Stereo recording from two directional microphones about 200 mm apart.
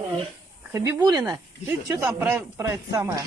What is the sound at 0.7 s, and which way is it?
Speech, 15° right (ahead or behind).